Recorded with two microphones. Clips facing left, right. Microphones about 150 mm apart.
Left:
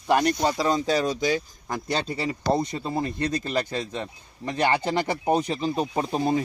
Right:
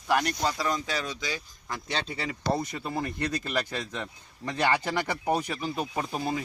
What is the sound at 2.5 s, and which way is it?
Speech, 25° left (ahead or behind).